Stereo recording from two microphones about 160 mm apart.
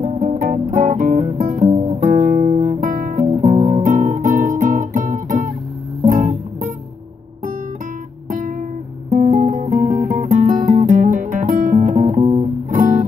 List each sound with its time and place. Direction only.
0.0 s music: 50° right (ahead or behind)
1.7 s guitar: 20° right (ahead or behind)
2.0 s guitar: 55° right (ahead or behind)
3.4 s guitar: 45° right (ahead or behind)
8.3 s guitar: 55° right (ahead or behind)
9.1 s guitar: 45° right (ahead or behind)
10.1 s music: 55° right (ahead or behind)
12.6 s guitar: 55° right (ahead or behind)